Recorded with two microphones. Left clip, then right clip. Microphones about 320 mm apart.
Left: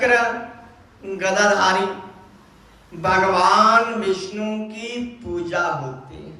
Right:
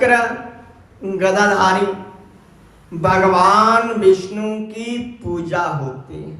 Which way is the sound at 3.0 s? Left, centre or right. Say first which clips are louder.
Right 4 dB; centre.